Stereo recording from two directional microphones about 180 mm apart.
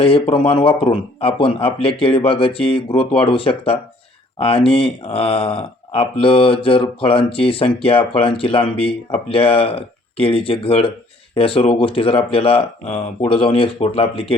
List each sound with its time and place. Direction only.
0.0 s speech: 30° left (ahead or behind)